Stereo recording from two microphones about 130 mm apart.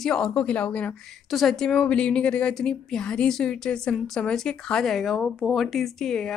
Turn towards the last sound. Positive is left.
turn(degrees=5)  # may be behind; listen again after turning